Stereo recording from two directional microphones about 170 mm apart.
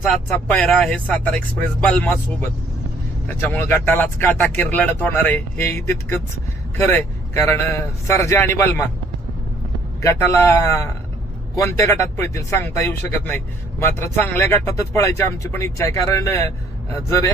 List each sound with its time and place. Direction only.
0.0 s speech: 5° left (ahead or behind)
10.0 s speech: 15° left (ahead or behind)